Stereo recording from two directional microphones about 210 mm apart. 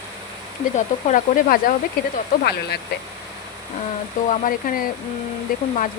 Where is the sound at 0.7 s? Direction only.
35° left (ahead or behind).